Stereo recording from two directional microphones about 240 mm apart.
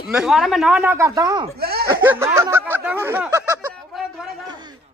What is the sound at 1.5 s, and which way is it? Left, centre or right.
Speech, right.